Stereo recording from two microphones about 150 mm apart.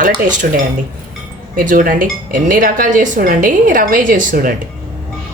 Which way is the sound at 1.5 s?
65° right (ahead or behind).